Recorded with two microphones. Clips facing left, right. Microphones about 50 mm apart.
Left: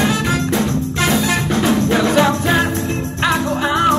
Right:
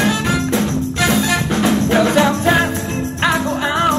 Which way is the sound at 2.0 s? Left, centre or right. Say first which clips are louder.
Right 1 dB; right.